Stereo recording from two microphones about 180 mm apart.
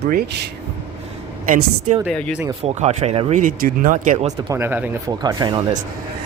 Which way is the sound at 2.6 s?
35° right (ahead or behind).